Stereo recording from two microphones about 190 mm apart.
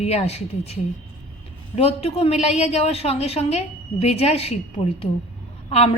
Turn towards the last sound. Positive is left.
turn(degrees=35)  # may be behind; listen again after turning